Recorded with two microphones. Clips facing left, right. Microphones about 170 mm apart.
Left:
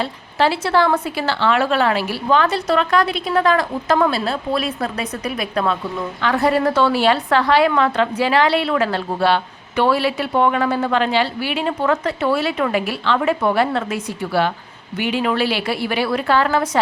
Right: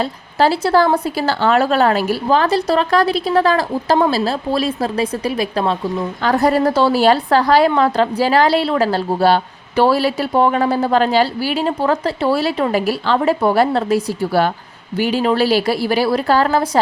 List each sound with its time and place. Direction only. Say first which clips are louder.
0.0 s a woman's voice: right 3 dB; 40° right (ahead or behind)